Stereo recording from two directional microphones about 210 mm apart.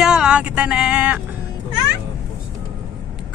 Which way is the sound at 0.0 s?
5° right (ahead or behind).